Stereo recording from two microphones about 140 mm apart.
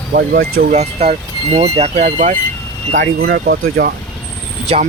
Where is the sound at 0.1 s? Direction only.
90° right.